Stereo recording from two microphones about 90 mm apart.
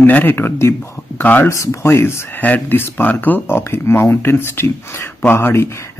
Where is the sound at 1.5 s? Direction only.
35° left (ahead or behind).